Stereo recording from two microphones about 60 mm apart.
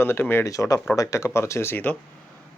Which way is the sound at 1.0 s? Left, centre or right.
Left.